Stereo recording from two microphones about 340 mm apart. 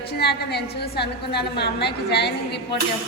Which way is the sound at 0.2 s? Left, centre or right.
Left.